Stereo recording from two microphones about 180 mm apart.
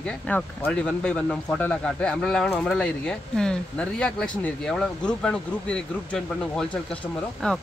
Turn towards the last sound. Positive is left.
turn(degrees=5)  # may be behind; listen again after turning